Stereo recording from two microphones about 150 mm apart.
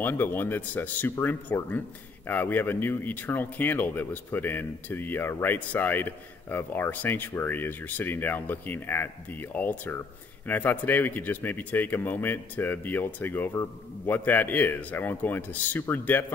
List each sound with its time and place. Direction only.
0.0 s speech: 15° left (ahead or behind)